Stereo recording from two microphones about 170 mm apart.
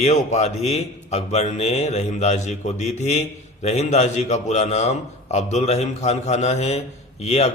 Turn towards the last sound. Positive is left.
turn(degrees=40)  # may be behind; listen again after turning